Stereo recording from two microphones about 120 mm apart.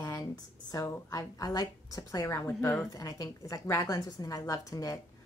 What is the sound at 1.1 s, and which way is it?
Speech, 30° left (ahead or behind).